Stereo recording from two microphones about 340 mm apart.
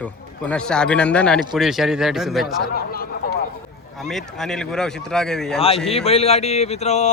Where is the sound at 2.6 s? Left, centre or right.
Left.